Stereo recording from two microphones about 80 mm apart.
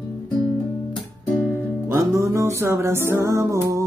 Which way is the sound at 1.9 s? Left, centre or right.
Right.